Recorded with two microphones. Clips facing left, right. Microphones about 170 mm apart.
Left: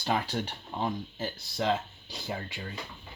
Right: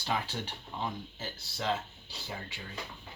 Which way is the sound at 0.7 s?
50° left (ahead or behind).